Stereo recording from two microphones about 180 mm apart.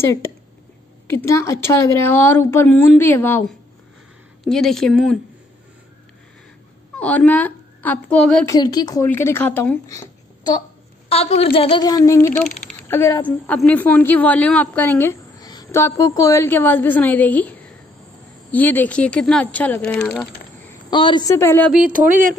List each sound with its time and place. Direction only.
0.0 s a woman's voice: 15° left (ahead or behind); by 5.2 s centre (ahead or behind)
7.0 s a woman's voice: 10° left (ahead or behind)
8.5 s speech: 20° left (ahead or behind)
11.1 s a woman's voice: 35° left (ahead or behind); by 20.7 s 5° left (ahead or behind)
20.9 s a woman's voice: 25° left (ahead or behind)